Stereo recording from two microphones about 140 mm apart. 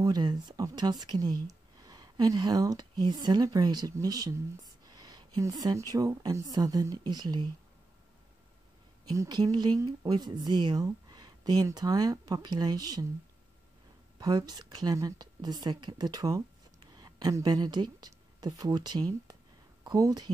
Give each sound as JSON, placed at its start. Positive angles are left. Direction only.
{"t": 0.0, "sound": "speech", "side_deg": -30}
{"t": 9.0, "sound": "speech", "side_deg": -25}
{"t": 14.2, "sound": "speech", "side_deg": -30}